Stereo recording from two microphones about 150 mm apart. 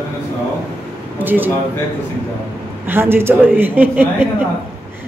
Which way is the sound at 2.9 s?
15° right (ahead or behind).